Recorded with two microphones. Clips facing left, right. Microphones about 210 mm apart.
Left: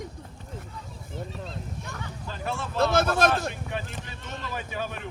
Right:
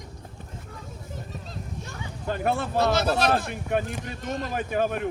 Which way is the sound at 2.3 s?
60° right (ahead or behind).